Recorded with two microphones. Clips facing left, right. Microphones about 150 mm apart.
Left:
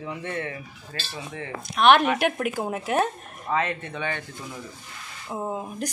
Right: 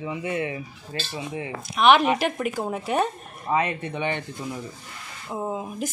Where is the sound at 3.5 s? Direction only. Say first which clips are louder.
Right 2 dB; 15° right (ahead or behind).